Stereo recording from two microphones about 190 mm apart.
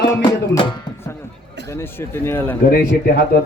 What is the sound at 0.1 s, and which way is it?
Music, 20° left (ahead or behind).